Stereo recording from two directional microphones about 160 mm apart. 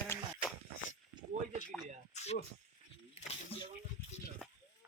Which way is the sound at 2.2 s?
45° left (ahead or behind).